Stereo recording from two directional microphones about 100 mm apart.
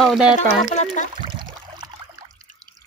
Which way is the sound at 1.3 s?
50° right (ahead or behind).